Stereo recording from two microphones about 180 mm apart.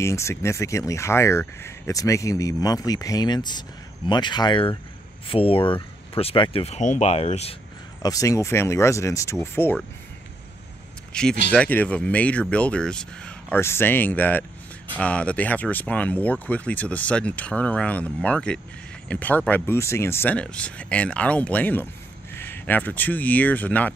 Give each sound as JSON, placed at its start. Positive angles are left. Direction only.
{"t": 0.0, "sound": "speech", "side_deg": 15}
{"t": 8.0, "sound": "speech", "side_deg": 20}
{"t": 11.1, "sound": "speech", "side_deg": 5}